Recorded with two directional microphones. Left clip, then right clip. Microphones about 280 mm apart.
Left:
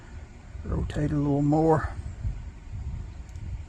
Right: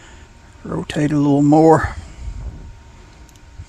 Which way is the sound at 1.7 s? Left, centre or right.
Right.